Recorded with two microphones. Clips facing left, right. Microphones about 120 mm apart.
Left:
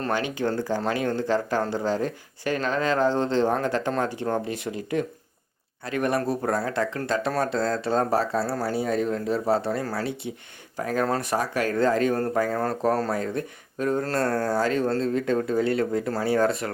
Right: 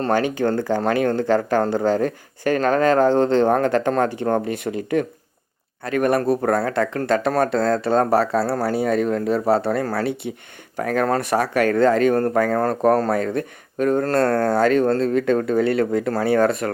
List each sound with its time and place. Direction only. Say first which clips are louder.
0.1 s speech: right 6 dB; 50° right (ahead or behind)